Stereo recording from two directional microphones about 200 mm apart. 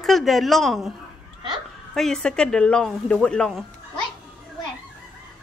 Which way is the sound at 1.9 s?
Centre (ahead or behind).